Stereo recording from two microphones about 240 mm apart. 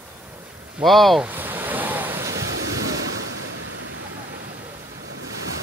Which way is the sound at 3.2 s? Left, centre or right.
Right.